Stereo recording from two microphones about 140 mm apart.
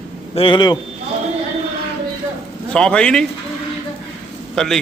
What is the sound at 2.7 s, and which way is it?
Speech, 5° left (ahead or behind).